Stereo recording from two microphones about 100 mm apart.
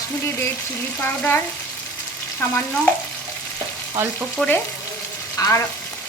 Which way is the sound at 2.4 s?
15° left (ahead or behind).